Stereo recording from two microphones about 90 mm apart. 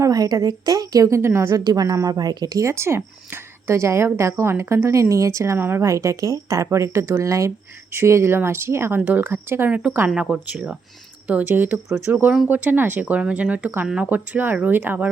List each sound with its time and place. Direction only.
0.0 s a woman's voice: 40° right (ahead or behind); by 5.9 s 25° right (ahead or behind)
5.9 s a woman's voice: 35° right (ahead or behind); by 14.1 s 10° right (ahead or behind)
14.1 s speech: 20° right (ahead or behind)